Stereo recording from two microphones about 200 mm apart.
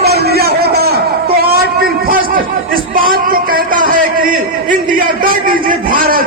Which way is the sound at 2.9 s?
45° right (ahead or behind).